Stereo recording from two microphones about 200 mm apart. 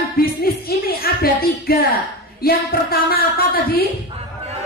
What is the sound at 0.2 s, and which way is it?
Music, 50° left (ahead or behind).